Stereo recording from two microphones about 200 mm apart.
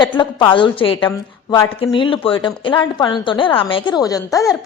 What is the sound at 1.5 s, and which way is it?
Speech, 10° left (ahead or behind).